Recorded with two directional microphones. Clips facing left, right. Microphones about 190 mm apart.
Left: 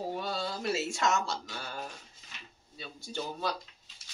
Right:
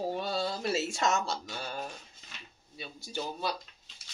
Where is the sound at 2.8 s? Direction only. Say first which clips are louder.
Even; 10° right (ahead or behind).